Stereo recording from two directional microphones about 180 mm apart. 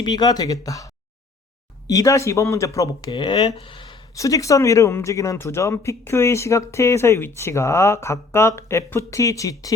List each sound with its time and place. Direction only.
0.0 s speech: 20° left (ahead or behind)
1.9 s speech: 20° left (ahead or behind)